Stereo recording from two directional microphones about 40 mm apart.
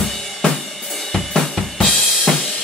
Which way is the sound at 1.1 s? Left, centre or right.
Centre.